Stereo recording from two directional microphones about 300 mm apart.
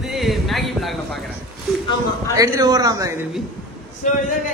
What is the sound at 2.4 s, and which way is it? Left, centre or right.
A man's voice, centre.